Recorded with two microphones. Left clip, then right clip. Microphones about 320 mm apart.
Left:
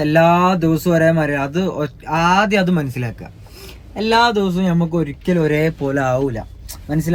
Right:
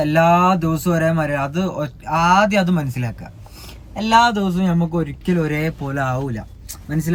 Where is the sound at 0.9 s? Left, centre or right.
Left.